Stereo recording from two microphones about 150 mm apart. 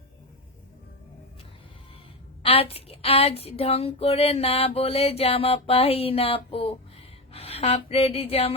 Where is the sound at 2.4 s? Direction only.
40° left (ahead or behind).